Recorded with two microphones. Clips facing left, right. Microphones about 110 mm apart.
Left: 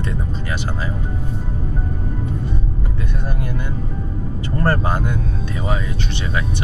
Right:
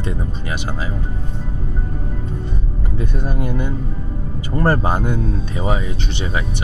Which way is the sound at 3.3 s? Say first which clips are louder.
Right 6 dB; 20° right (ahead or behind).